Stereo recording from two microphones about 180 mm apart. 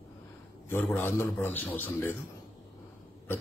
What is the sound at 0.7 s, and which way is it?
A man's voice, 10° left (ahead or behind).